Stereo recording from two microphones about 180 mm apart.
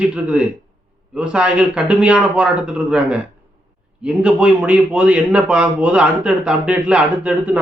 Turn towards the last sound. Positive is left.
turn(degrees=-5)  # may be behind; listen again after turning